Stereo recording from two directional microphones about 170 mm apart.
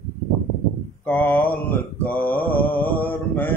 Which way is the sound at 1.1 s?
10° left (ahead or behind).